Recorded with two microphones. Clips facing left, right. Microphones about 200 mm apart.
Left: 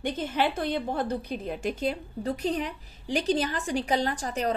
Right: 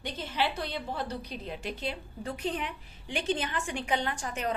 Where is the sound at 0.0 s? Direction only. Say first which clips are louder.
Left 5 dB; 50° left (ahead or behind).